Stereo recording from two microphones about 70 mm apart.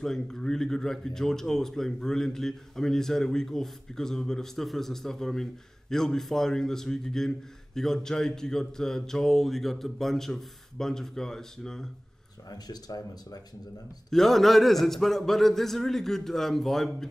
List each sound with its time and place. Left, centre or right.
0.0 s speech: centre
12.4 s speech: left
14.1 s a sound: centre